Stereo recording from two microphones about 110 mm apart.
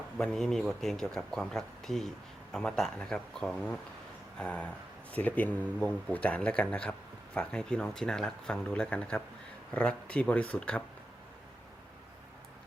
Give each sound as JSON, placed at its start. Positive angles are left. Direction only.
{"t": 0.2, "sound": "speech", "side_deg": 5}